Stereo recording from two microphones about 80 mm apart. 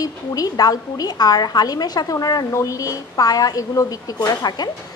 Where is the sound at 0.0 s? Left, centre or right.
Left.